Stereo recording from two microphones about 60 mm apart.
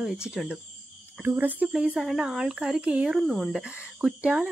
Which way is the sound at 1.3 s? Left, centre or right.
Right.